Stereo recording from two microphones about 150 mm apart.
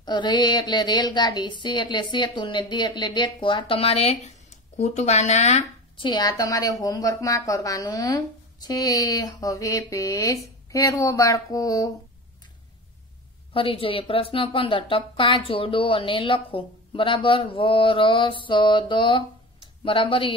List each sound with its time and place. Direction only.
0.0 s speech: 30° left (ahead or behind); by 6.0 s 45° left (ahead or behind)
6.0 s a woman's voice: 25° left (ahead or behind)
13.5 s speech: 40° left (ahead or behind)